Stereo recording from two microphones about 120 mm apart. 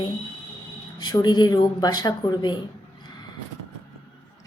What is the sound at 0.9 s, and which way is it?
Speech, 35° left (ahead or behind).